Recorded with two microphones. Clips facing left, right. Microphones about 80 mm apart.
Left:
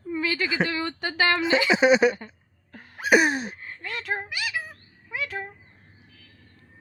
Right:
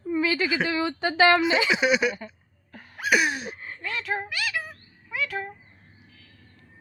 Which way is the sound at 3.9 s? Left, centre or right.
Left.